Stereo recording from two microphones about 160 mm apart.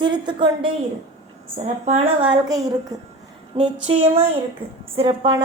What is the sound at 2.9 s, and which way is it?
Speech, 20° right (ahead or behind).